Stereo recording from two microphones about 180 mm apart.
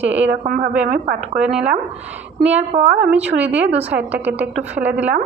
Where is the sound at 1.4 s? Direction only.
5° right (ahead or behind).